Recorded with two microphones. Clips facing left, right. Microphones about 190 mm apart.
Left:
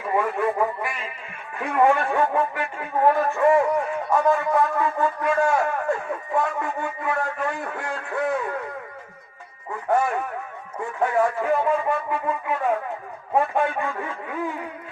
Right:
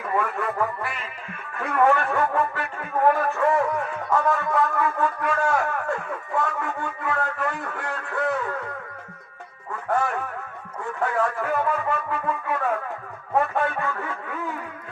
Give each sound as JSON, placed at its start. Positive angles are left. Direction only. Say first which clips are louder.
{"t": 0.5, "sound": "speech", "louder": "left 2 dB", "side_deg": 15}
{"t": 2.3, "sound": "music", "louder": "left 1 dB", "side_deg": 15}
{"t": 10.8, "sound": "speech", "louder": "left 3 dB", "side_deg": 15}
{"t": 11.9, "sound": "brass instrument", "louder": "left 2 dB", "side_deg": 15}
{"t": 13.3, "sound": "a sound", "louder": "left 1 dB", "side_deg": 15}